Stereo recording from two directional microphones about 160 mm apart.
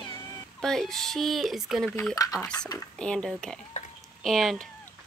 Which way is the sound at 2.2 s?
20° left (ahead or behind).